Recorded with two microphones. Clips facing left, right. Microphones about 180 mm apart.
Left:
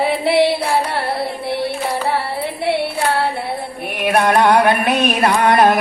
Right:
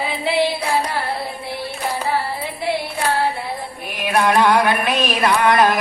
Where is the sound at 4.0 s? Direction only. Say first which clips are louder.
Left 2 dB; 60° left (ahead or behind).